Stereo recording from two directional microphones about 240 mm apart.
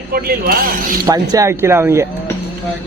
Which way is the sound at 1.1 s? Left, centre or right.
Centre.